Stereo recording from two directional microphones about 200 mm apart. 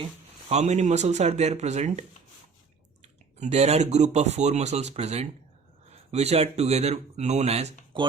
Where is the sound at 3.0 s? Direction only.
35° right (ahead or behind).